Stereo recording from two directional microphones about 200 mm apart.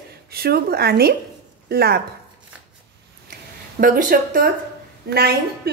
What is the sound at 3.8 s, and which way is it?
Speech, 45° right (ahead or behind).